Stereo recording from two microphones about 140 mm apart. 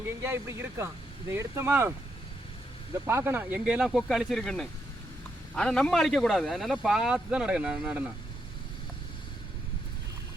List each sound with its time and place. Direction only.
0.2 s speech: 20° right (ahead or behind)
3.1 s speech: 15° right (ahead or behind)